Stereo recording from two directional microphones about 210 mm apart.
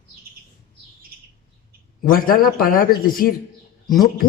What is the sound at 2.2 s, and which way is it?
Speech, 45° left (ahead or behind).